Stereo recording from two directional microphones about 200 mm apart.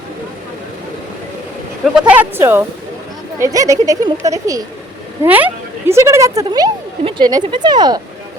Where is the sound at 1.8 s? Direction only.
5° right (ahead or behind).